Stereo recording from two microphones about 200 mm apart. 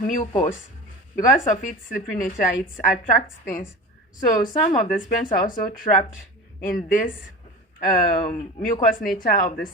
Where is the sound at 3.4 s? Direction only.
40° left (ahead or behind).